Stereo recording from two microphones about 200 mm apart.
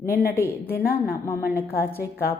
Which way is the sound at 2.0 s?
50° left (ahead or behind).